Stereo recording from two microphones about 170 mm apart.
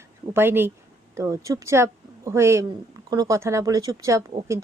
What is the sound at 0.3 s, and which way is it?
Speech, 15° right (ahead or behind).